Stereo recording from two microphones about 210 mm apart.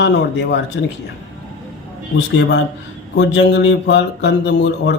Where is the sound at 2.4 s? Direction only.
55° left (ahead or behind).